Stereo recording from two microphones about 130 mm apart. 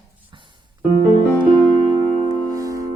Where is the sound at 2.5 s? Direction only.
25° right (ahead or behind).